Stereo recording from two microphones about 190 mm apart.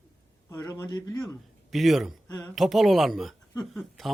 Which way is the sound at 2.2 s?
20° left (ahead or behind).